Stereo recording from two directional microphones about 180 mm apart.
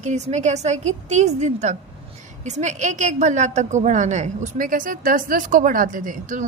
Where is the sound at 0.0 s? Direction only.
40° right (ahead or behind).